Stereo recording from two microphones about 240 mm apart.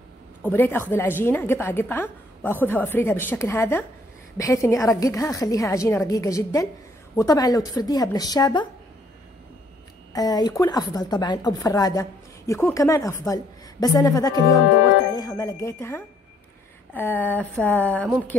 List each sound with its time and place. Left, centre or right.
0.4 s a woman's voice: centre
10.1 s a woman's voice: centre